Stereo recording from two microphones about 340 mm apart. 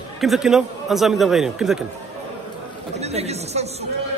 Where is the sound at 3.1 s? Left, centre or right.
Centre.